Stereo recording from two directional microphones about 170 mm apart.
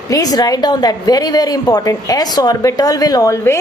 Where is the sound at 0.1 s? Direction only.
20° left (ahead or behind).